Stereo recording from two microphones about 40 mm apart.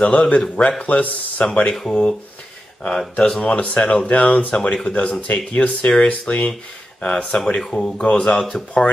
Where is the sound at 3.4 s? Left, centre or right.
Left.